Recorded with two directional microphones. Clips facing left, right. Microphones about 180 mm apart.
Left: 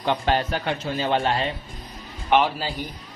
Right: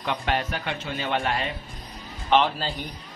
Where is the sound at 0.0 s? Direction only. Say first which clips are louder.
Left 4 dB; 30° left (ahead or behind).